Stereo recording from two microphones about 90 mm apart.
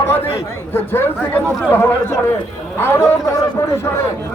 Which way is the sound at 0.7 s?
25° left (ahead or behind).